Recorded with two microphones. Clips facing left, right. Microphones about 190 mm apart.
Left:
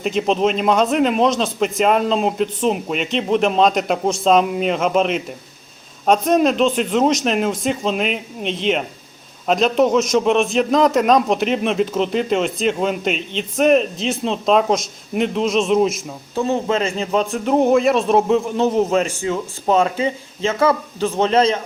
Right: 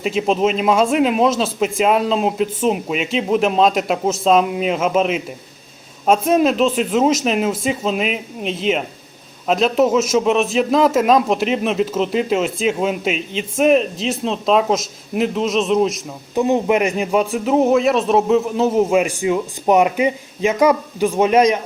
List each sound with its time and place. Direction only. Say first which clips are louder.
0.0 s a man's voice: even; 5° right (ahead or behind)
16.3 s speech: right 3 dB; 15° right (ahead or behind)